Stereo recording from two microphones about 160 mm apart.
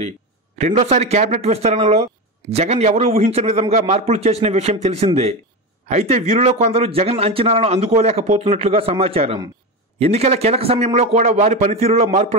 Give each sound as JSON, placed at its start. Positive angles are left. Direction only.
{"t": 0.6, "sound": "a man's voice", "side_deg": -45}